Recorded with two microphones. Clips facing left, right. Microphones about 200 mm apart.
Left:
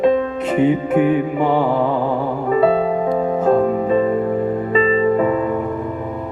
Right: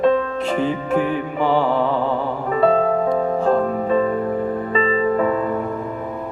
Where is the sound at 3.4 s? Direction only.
20° left (ahead or behind).